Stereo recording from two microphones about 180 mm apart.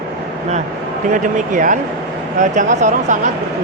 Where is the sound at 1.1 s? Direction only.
45° right (ahead or behind).